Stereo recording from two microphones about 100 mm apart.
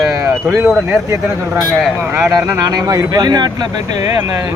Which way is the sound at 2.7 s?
40° right (ahead or behind).